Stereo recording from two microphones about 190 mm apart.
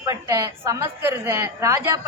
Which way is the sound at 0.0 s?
15° right (ahead or behind).